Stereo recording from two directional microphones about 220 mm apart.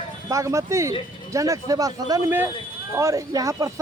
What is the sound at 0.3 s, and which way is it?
A man's voice, 15° right (ahead or behind).